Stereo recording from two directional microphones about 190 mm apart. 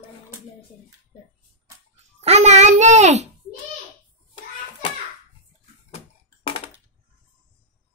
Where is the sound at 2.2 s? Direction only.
35° right (ahead or behind).